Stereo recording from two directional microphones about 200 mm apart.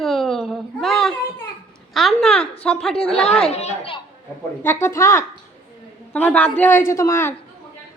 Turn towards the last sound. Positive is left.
turn(degrees=10)  # may be behind; listen again after turning